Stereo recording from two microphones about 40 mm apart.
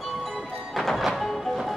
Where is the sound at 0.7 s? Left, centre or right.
Centre.